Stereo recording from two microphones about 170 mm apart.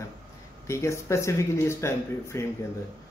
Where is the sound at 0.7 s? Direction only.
15° left (ahead or behind).